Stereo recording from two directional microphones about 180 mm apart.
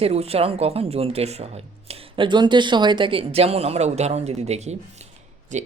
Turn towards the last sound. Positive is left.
turn(degrees=-40)  # may be behind; listen again after turning